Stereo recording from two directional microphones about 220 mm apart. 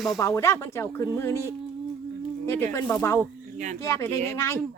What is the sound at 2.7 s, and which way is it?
Speech, 10° left (ahead or behind).